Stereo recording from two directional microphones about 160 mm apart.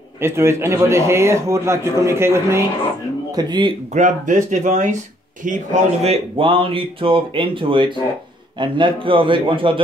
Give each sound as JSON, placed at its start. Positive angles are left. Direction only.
{"t": 0.2, "sound": "a man's voice", "side_deg": -15}
{"t": 3.9, "sound": "speech", "side_deg": -55}